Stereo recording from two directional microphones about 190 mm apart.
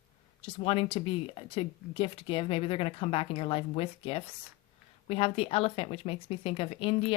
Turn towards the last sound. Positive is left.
turn(degrees=30)  # may be behind; listen again after turning